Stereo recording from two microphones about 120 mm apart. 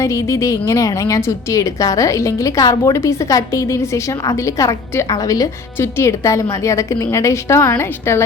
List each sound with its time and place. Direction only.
0.0 s a woman's voice: 25° left (ahead or behind)